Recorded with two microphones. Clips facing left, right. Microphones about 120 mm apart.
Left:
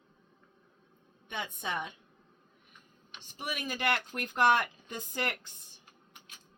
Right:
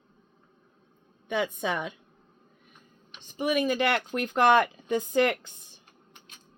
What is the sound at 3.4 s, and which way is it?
Speech, 90° right.